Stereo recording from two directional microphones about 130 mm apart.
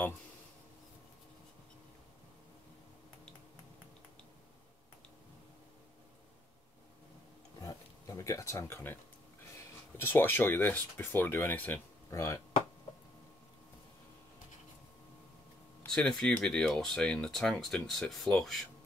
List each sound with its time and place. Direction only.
7.6 s a sound: 25° left (ahead or behind)
9.6 s speech: 15° left (ahead or behind)
15.8 s speech: 5° left (ahead or behind)